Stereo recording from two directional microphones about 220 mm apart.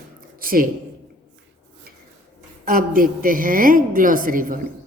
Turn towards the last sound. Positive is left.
turn(degrees=-40)  # may be behind; listen again after turning